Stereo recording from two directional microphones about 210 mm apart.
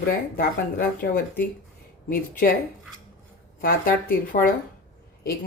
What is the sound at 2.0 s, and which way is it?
Speech, 45° left (ahead or behind).